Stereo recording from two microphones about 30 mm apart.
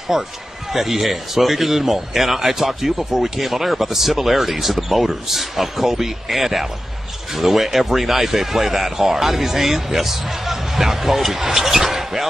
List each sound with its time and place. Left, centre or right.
0.1 s a man's voice: centre